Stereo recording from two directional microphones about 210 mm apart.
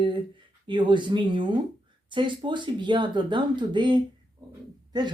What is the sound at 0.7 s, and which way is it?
Speech, 20° right (ahead or behind).